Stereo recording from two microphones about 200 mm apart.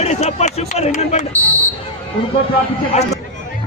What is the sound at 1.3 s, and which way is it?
Speech, 15° right (ahead or behind).